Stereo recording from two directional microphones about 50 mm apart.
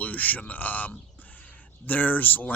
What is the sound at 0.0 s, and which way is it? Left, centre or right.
Speech, left.